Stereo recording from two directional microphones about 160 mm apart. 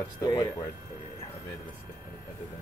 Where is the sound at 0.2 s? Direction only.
25° left (ahead or behind).